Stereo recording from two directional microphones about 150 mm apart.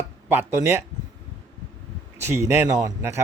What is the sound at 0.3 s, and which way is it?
Speech, 15° right (ahead or behind).